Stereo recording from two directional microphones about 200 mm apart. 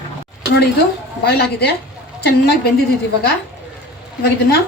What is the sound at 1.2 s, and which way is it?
A woman's voice, 55° left (ahead or behind).